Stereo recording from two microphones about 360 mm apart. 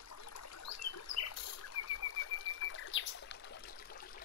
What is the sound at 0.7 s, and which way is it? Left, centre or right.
Rodents, left.